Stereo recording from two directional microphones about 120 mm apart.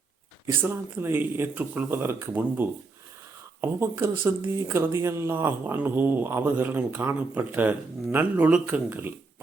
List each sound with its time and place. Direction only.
0.4 s speech: 20° right (ahead or behind)
4.0 s speech: 20° right (ahead or behind)